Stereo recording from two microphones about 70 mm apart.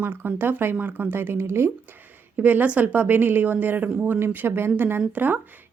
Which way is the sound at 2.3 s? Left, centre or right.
Right.